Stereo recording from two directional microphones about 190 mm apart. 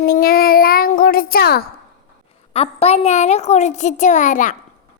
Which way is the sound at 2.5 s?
30° left (ahead or behind).